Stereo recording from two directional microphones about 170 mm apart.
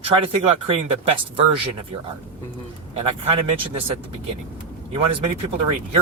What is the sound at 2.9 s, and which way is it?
Speech, 35° right (ahead or behind).